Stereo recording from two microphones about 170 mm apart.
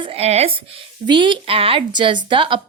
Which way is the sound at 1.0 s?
25° right (ahead or behind).